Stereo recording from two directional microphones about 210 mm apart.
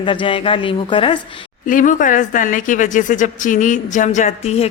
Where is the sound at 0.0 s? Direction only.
25° left (ahead or behind).